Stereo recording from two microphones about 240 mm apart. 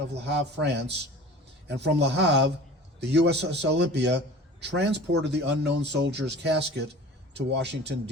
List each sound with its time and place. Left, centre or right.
0.1 s speech: right